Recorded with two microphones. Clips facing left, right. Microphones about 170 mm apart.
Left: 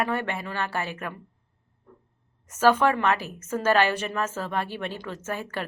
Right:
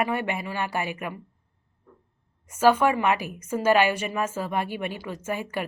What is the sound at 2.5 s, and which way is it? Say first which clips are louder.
A woman's voice: right 1 dB; 10° right (ahead or behind).